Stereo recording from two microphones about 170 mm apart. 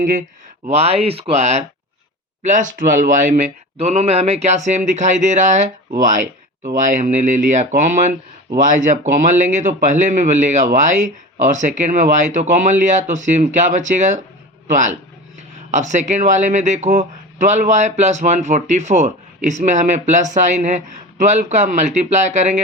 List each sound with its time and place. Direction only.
0.0 s speech: 50° right (ahead or behind)
0.7 s speech: 35° right (ahead or behind)